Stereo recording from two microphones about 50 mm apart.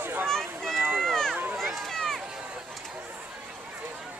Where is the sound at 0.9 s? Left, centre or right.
Centre.